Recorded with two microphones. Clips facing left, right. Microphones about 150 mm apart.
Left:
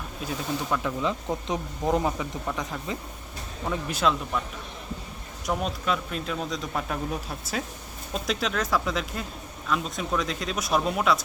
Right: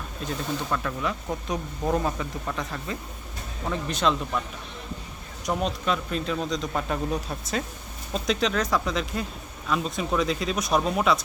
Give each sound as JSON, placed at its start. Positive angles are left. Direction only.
{"t": 0.2, "sound": "speech", "side_deg": 5}
{"t": 5.5, "sound": "speech", "side_deg": 0}